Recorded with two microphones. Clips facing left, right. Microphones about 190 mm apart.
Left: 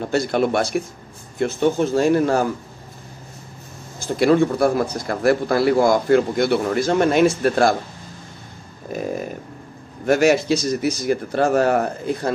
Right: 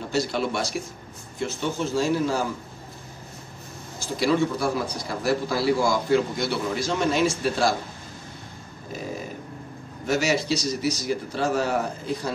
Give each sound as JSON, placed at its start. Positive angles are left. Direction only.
{"t": 0.1, "sound": "a man's voice", "side_deg": 55}
{"t": 4.2, "sound": "a man's voice", "side_deg": 55}
{"t": 10.0, "sound": "a man's voice", "side_deg": 55}